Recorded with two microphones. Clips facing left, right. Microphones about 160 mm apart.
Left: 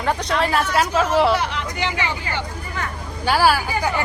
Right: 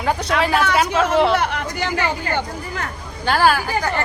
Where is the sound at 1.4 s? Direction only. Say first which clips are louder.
Right 2 dB; 55° right (ahead or behind).